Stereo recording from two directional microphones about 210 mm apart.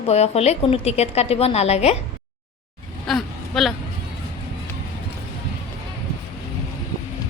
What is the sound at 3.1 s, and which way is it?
Speech, centre (ahead or behind).